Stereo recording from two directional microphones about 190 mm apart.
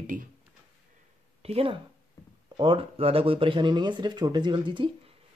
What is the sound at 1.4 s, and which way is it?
Speech, 30° right (ahead or behind).